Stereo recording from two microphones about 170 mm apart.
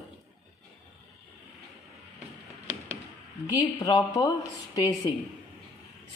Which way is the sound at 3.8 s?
20° left (ahead or behind).